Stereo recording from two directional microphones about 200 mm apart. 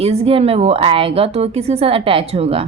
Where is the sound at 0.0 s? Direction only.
30° right (ahead or behind).